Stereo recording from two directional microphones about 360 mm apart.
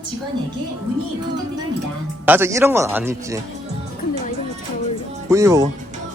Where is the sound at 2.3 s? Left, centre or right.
Centre.